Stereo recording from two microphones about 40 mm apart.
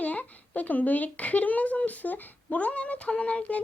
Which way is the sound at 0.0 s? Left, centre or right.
Left.